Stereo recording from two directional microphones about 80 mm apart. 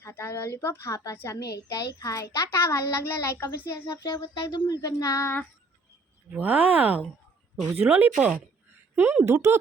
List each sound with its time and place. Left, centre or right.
0.1 s a child's voice: left
1.4 s a child's voice: left
3.8 s speech: left
5.2 s speech: left
6.3 s speech: centre
9.2 s speech: right